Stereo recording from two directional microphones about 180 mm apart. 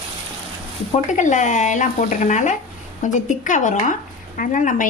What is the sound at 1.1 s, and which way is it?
A woman's voice, 45° left (ahead or behind).